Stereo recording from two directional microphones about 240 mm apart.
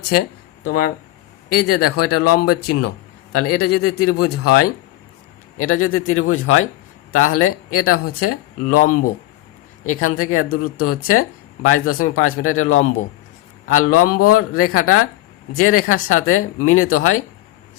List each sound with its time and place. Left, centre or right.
0.6 s a man's voice: left
10.5 s speech: left
10.8 s a man's voice: left